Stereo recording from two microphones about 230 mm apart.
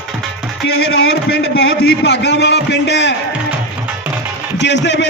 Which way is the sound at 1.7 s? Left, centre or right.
Left.